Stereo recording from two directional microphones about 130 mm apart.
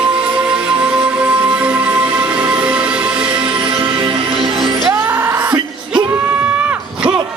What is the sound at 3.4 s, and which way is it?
Music, 45° right (ahead or behind).